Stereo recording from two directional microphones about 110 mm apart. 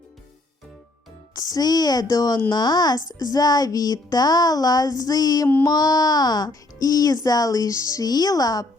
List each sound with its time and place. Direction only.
1.4 s speech: 35° left (ahead or behind)